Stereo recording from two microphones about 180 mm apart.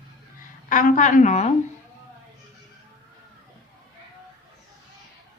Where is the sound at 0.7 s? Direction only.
50° left (ahead or behind).